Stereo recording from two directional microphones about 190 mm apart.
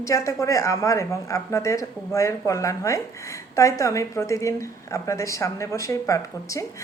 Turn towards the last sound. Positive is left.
turn(degrees=15)  # may be behind; listen again after turning